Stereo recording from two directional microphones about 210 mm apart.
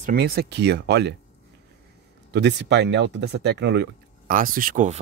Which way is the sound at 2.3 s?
55° right (ahead or behind).